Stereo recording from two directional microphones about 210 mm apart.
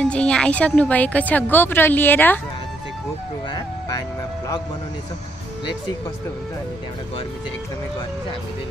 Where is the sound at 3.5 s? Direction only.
20° left (ahead or behind).